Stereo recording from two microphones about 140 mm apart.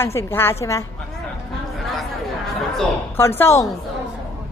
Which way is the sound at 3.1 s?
15° left (ahead or behind).